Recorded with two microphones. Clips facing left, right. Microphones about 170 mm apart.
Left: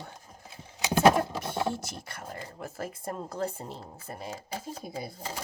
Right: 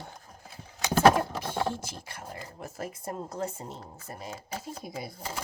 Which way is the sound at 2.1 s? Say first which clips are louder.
Left 1 dB; 50° left (ahead or behind).